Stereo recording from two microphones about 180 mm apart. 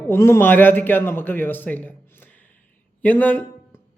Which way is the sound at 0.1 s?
15° left (ahead or behind).